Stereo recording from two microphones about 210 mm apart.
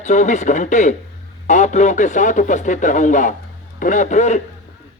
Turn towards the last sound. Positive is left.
turn(degrees=35)  # may be behind; listen again after turning